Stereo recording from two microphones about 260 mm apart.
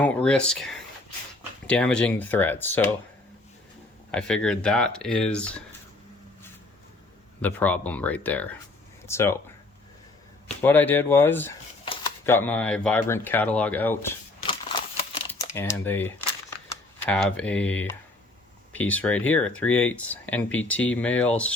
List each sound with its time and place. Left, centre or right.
0.0 s speech: centre
4.1 s speech: centre
7.4 s speech: centre
10.6 s speech: centre
15.3 s speech: centre